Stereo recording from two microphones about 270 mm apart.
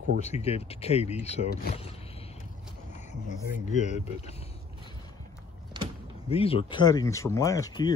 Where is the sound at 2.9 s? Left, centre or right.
Left.